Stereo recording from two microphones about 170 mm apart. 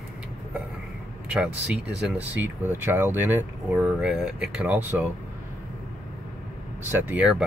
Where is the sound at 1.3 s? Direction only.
5° right (ahead or behind).